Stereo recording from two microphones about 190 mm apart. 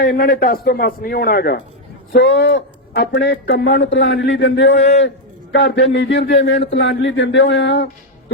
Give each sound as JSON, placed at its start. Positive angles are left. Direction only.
{"t": 0.0, "sound": "a man's voice", "side_deg": 50}
{"t": 2.1, "sound": "a man's voice", "side_deg": 60}
{"t": 3.8, "sound": "speech", "side_deg": 70}
{"t": 4.8, "sound": "speech", "side_deg": 35}
{"t": 5.0, "sound": "a man's voice", "side_deg": 65}